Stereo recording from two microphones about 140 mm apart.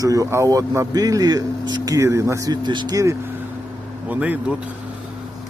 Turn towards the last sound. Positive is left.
turn(degrees=-10)  # may be behind; listen again after turning